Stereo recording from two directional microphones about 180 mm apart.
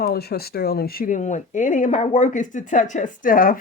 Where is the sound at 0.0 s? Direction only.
60° left (ahead or behind).